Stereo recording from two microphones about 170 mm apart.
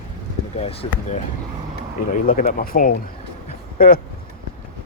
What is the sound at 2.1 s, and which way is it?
Speech, 55° left (ahead or behind).